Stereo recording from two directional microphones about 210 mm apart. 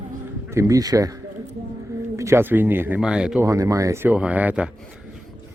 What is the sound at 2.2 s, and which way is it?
Speech, 10° right (ahead or behind).